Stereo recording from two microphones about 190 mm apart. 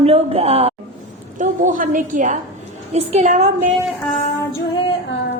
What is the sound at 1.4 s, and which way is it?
A woman's voice, 45° right (ahead or behind).